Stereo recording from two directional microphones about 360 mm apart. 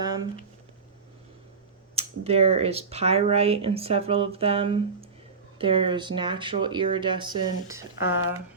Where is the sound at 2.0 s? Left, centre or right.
Centre.